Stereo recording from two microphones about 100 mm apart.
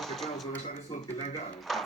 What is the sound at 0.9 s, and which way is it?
Speech, 45° left (ahead or behind).